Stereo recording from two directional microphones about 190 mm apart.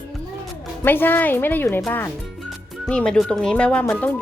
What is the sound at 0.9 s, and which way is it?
Speech, 10° left (ahead or behind).